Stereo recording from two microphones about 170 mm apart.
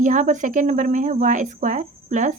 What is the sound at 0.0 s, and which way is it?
Speech, 50° right (ahead or behind).